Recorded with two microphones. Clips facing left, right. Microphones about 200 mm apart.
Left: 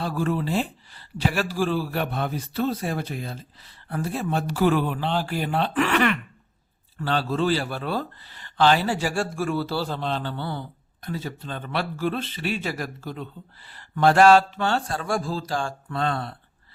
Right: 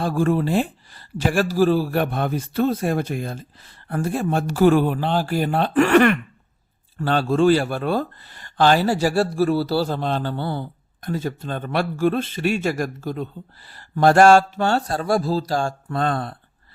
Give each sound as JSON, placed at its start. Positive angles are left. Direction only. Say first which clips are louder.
{"t": 0.0, "sound": "speech", "louder": "right 5 dB", "side_deg": -45}